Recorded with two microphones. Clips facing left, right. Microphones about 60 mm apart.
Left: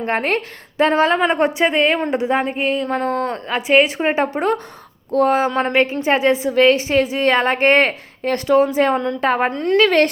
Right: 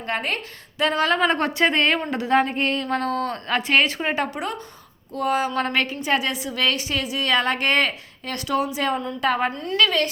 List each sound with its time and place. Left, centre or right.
0.0 s a woman's voice: left
3.4 s speech: centre
4.0 s a woman's voice: left
5.5 s a woman's voice: left
9.5 s a woman's voice: left
9.7 s a woman's voice: left